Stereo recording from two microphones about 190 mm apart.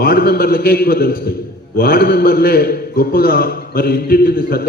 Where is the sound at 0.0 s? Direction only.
50° left (ahead or behind).